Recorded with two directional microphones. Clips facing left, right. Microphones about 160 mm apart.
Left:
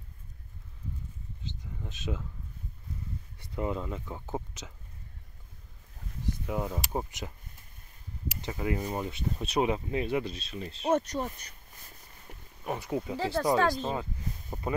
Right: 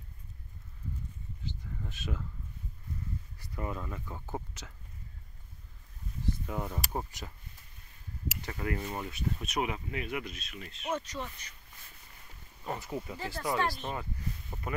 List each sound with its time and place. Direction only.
1.4 s a sound: 20° left (ahead or behind)
3.3 s speech: 20° left (ahead or behind)
6.2 s speech: 15° left (ahead or behind)
8.4 s speech: 15° left (ahead or behind); by 11.0 s 30° left (ahead or behind)
11.0 s speech: 45° left (ahead or behind)
12.6 s speech: 15° left (ahead or behind)
13.1 s speech: 90° left
13.4 s speech: 40° left (ahead or behind)
14.5 s a sound: 35° left (ahead or behind)